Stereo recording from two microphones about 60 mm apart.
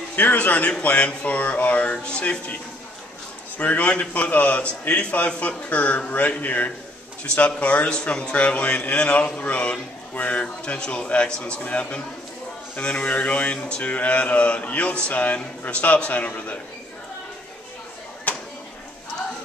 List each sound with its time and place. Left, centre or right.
0.1 s a man's voice: left
3.5 s a man's voice: left
18.3 s a sound: left